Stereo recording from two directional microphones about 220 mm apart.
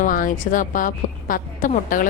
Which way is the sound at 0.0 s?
40° left (ahead or behind).